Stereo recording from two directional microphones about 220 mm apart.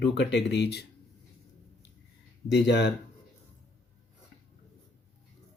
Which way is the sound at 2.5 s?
50° left (ahead or behind).